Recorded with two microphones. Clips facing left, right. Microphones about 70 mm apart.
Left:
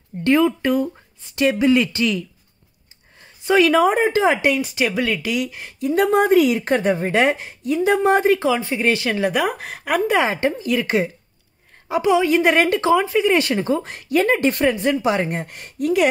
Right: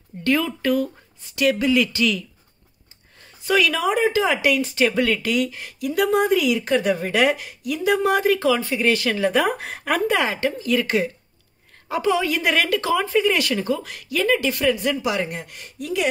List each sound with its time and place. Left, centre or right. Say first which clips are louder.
0.2 s speech: left 5 dB; left
3.2 s a sound: left 4 dB; left
3.6 s speech: left 5 dB; left
4.6 s speech: right 1 dB; centre
9.4 s a woman's voice: even; centre
10.1 s speech: left 3 dB; left
13.0 s speech: left 1 dB; centre
13.3 s speech: left 4 dB; left